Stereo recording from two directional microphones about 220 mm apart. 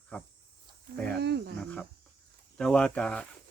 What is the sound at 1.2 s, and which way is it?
Speech, 50° right (ahead or behind).